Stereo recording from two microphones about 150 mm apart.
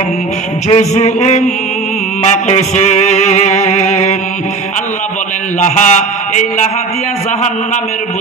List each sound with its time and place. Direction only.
0.7 s music: 50° left (ahead or behind)
5.6 s music: 50° left (ahead or behind)